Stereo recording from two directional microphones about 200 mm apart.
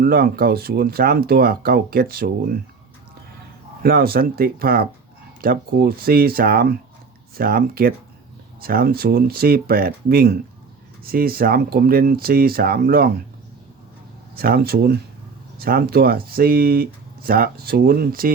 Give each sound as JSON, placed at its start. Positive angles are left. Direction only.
{"t": 0.0, "sound": "speech", "side_deg": -50}
{"t": 3.8, "sound": "speech", "side_deg": -50}
{"t": 14.3, "sound": "speech", "side_deg": -50}